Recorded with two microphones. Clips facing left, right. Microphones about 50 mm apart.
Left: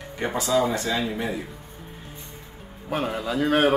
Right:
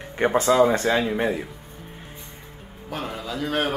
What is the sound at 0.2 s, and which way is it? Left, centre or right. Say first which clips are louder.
Speech: right 5 dB; right.